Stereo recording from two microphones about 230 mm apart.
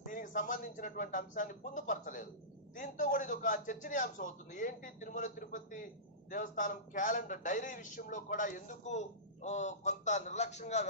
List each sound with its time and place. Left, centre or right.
0.0 s a man's voice: left